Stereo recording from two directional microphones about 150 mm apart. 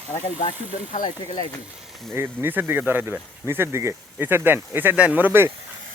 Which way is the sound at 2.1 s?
15° right (ahead or behind).